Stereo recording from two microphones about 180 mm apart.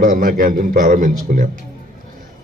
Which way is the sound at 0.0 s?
50° right (ahead or behind).